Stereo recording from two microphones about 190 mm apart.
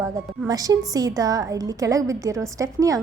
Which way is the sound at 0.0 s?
20° right (ahead or behind).